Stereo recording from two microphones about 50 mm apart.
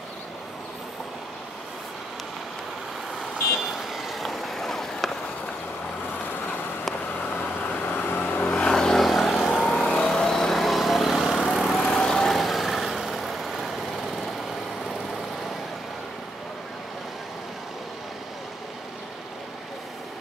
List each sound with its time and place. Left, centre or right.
3.2 s vehicle: centre
7.8 s vehicle: left
8.5 s vehicle: centre
12.3 s vehicle: centre